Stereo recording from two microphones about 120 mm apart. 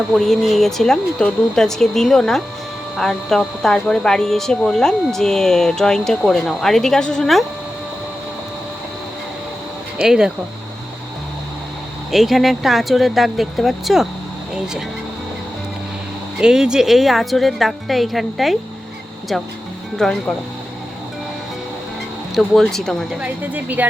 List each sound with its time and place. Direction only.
0.2 s speech: centre (ahead or behind)
10.0 s speech: 5° right (ahead or behind)
12.1 s speech: centre (ahead or behind)
16.4 s speech: 5° right (ahead or behind)
22.4 s speech: centre (ahead or behind)
23.2 s speech: 15° right (ahead or behind)